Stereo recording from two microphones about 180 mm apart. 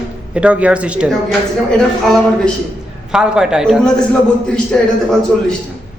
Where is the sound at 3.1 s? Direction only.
5° right (ahead or behind).